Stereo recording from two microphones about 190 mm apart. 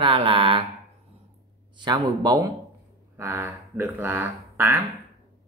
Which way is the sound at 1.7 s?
20° right (ahead or behind).